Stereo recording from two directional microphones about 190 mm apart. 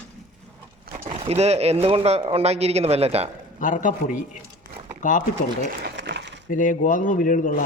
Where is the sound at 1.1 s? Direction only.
35° right (ahead or behind).